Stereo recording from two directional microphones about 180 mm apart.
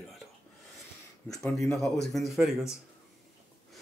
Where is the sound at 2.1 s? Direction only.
Centre (ahead or behind).